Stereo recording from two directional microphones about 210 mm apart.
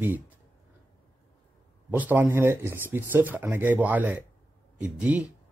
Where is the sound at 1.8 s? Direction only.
10° right (ahead or behind).